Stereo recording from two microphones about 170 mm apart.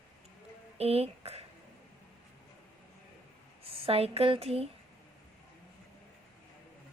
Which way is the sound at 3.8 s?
35° right (ahead or behind).